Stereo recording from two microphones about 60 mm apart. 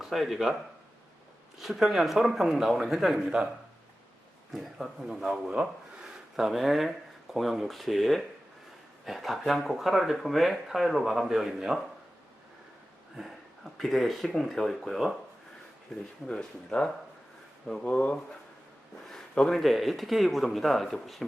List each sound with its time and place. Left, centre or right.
0.0 s speech: centre
1.5 s speech: centre
4.5 s speech: centre
13.7 s speech: centre
16.2 s speech: centre
17.8 s speech: left
19.0 s speech: centre